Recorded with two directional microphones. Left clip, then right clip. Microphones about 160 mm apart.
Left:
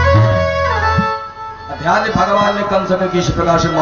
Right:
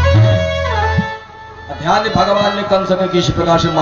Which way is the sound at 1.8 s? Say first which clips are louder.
Right 1 dB; 55° right (ahead or behind).